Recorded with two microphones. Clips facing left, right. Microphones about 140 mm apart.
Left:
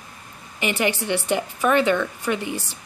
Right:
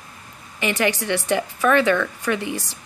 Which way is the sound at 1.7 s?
15° left (ahead or behind).